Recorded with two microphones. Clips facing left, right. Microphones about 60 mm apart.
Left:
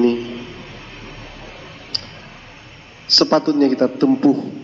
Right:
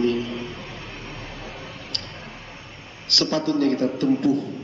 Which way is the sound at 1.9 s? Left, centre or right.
Left.